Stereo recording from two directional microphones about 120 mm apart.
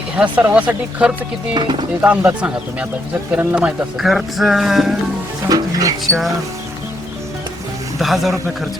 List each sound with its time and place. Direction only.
0.2 s speech: 10° right (ahead or behind)
5.5 s speech: 30° right (ahead or behind)
6.1 s speech: centre (ahead or behind)
7.9 s speech: centre (ahead or behind)